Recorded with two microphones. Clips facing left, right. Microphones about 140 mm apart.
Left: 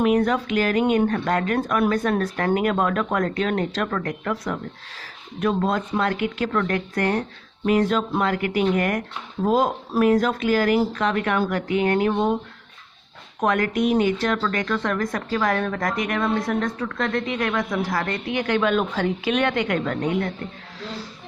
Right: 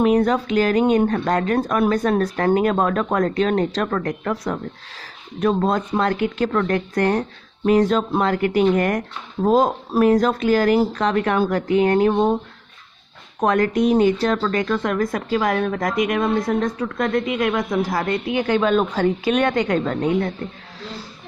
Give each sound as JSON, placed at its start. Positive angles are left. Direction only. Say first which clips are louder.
{"t": 0.0, "sound": "speech", "louder": "right 3 dB", "side_deg": -35}
{"t": 13.4, "sound": "a woman's voice", "louder": "right 3 dB", "side_deg": -35}